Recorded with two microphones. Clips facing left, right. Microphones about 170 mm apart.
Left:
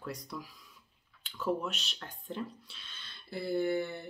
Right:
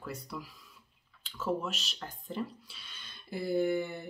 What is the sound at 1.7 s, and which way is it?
Speech, 5° right (ahead or behind).